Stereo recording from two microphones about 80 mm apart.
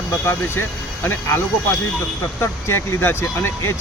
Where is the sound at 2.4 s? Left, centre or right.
Left.